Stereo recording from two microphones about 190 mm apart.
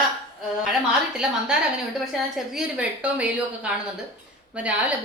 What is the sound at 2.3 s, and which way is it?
A woman's voice, 5° right (ahead or behind).